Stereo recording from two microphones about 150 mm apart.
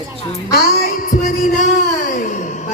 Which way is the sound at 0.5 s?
90° left.